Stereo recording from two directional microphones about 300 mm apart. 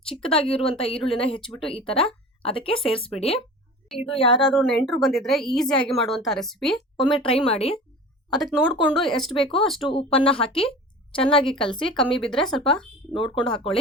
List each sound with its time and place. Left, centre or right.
0.1 s a woman's voice: centre
2.4 s speech: centre
3.8 s a woman's voice: centre
7.2 s speech: centre
8.3 s a woman's voice: centre
9.9 s a woman's voice: centre
11.9 s a woman's voice: centre
13.1 s a woman's voice: centre